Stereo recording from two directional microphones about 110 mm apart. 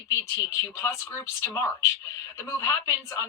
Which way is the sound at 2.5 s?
25° left (ahead or behind).